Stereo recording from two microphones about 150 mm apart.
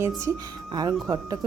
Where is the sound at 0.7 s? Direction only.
25° right (ahead or behind).